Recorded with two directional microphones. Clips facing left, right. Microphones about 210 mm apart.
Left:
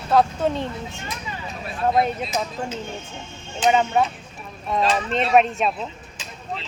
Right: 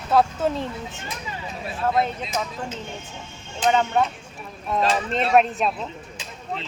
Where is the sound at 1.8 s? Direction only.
20° left (ahead or behind).